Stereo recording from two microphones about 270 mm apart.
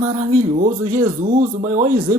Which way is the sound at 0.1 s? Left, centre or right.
Right.